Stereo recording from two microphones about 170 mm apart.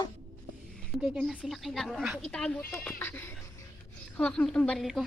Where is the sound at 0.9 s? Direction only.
5° right (ahead or behind).